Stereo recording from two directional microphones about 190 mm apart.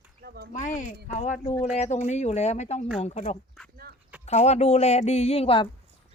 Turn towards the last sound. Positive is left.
turn(degrees=30)  # may be behind; listen again after turning